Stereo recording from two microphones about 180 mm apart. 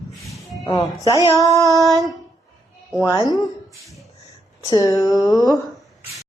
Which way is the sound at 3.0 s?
20° left (ahead or behind).